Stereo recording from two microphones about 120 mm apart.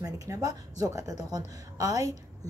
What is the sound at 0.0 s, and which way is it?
A woman's voice, 30° right (ahead or behind).